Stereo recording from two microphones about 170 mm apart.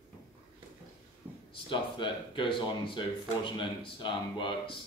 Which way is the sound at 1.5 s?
30° left (ahead or behind).